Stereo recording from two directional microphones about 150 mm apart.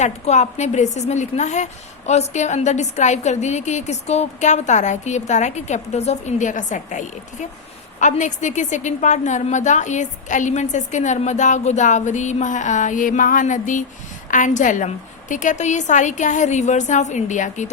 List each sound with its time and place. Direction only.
0.0 s a woman's voice: 50° left (ahead or behind)